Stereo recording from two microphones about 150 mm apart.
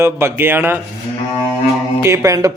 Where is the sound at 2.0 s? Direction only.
20° right (ahead or behind).